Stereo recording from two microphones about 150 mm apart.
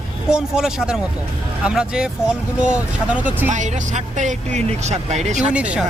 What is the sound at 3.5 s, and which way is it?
Speech, 55° right (ahead or behind).